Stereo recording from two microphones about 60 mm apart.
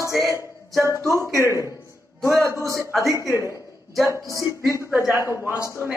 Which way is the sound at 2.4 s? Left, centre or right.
Right.